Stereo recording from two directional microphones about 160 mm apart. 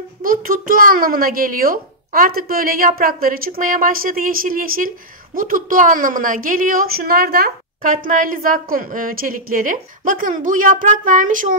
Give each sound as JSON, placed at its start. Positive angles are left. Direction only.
{"t": 0.2, "sound": "a child's voice", "side_deg": -60}